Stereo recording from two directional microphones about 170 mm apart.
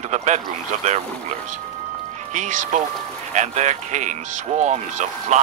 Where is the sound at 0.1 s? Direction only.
45° right (ahead or behind).